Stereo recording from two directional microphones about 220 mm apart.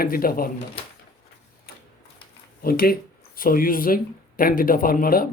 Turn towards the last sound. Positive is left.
turn(degrees=40)  # may be behind; listen again after turning